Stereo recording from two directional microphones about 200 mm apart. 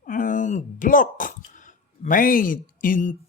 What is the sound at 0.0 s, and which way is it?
Speech, 40° left (ahead or behind).